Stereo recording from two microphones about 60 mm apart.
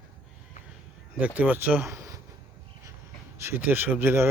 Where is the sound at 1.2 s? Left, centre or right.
Right.